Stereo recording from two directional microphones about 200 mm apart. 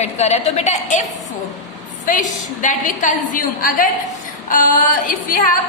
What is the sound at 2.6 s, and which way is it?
A woman's voice, 40° left (ahead or behind).